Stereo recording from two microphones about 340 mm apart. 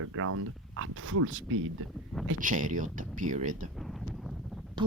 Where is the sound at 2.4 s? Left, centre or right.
Right.